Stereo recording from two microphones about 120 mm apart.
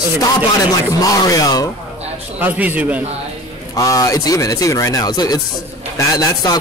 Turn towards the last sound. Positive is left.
turn(degrees=30)  # may be behind; listen again after turning